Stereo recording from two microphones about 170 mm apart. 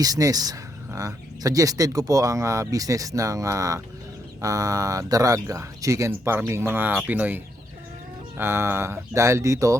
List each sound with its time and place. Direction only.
0.0 s speech: 20° right (ahead or behind)